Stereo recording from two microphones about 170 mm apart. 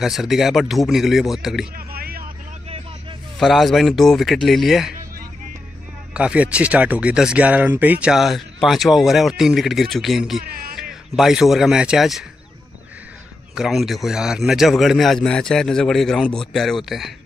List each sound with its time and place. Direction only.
0.0 s speech: centre (ahead or behind)
1.8 s a sound: 65° right (ahead or behind)
3.3 s speech: centre (ahead or behind)
6.1 s speech: 5° right (ahead or behind)
10.4 s speech: 60° right (ahead or behind)
10.8 s a man's voice: 5° right (ahead or behind)
13.6 s speech: centre (ahead or behind)